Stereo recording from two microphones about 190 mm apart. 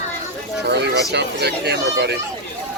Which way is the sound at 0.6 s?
65° right (ahead or behind).